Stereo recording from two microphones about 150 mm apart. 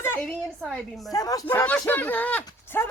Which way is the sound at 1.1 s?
25° left (ahead or behind).